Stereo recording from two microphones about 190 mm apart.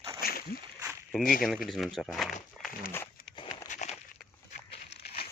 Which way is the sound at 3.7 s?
40° left (ahead or behind).